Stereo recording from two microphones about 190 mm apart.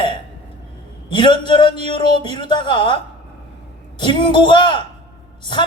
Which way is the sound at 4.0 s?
25° left (ahead or behind).